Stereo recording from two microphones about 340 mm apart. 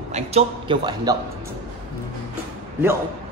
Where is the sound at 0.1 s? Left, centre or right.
Centre.